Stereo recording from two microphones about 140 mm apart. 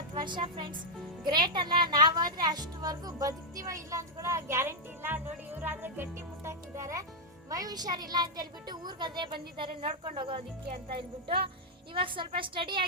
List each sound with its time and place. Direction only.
0.1 s speech: 35° right (ahead or behind)